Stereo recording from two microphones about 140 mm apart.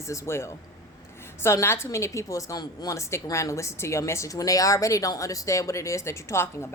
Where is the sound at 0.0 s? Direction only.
20° left (ahead or behind).